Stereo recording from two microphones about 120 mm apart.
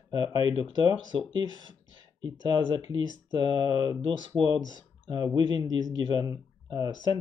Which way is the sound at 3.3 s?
40° right (ahead or behind).